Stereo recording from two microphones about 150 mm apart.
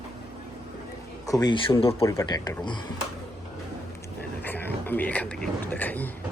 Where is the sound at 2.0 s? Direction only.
25° left (ahead or behind).